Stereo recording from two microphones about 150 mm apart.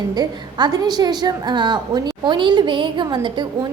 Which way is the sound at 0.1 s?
25° right (ahead or behind).